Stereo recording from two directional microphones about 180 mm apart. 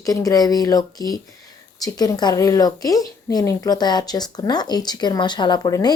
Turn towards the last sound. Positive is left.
turn(degrees=25)  # may be behind; listen again after turning